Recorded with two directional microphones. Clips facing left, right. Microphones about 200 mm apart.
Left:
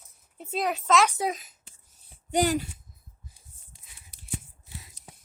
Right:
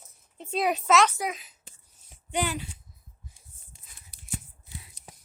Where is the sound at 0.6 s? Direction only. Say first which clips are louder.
Right 1 dB; 10° right (ahead or behind).